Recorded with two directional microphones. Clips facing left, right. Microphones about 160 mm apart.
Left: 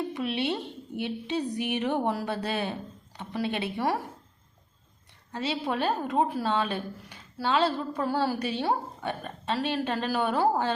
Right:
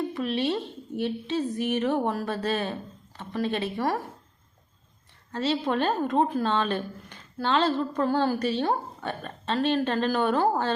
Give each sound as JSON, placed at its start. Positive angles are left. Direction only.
{"t": 0.1, "sound": "a woman's voice", "side_deg": 15}
{"t": 5.3, "sound": "a woman's voice", "side_deg": 10}